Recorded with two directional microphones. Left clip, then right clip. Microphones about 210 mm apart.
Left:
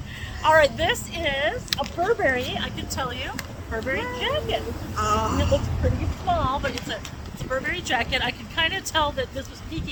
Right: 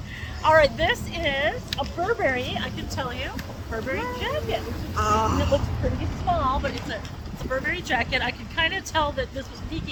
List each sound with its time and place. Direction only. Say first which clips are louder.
0.4 s a woman's voice: even; 15° left (ahead or behind)
4.9 s speech: right 1 dB; 10° right (ahead or behind)
6.3 s a woman's voice: even; 15° left (ahead or behind)